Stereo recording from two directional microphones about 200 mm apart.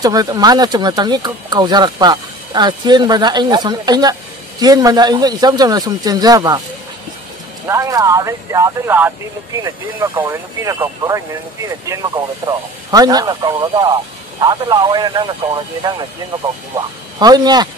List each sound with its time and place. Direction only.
0.0 s speech: 20° right (ahead or behind)
7.6 s speech: 15° right (ahead or behind)